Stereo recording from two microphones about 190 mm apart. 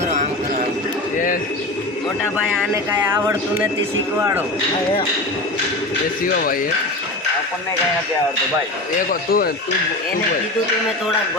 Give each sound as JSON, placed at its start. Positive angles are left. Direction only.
{"t": 2.9, "sound": "speech", "side_deg": -10}
{"t": 6.2, "sound": "speech", "side_deg": 50}
{"t": 9.0, "sound": "speech", "side_deg": 50}